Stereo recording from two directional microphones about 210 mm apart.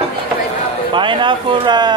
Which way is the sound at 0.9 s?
25° right (ahead or behind).